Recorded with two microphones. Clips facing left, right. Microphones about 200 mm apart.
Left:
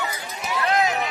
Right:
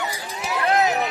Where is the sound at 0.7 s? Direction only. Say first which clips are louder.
Right 2 dB; 35° right (ahead or behind).